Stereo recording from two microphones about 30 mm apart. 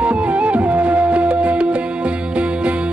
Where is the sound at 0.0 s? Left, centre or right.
Right.